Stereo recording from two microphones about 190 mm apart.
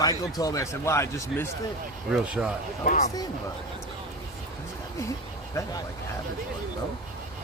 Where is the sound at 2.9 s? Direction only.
40° left (ahead or behind).